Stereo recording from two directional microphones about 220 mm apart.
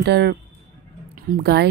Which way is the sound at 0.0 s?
50° right (ahead or behind).